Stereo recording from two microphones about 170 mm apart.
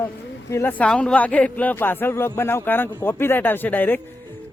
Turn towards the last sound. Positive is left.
turn(degrees=10)  # may be behind; listen again after turning